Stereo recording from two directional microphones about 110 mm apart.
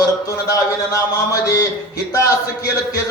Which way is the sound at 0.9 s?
30° left (ahead or behind).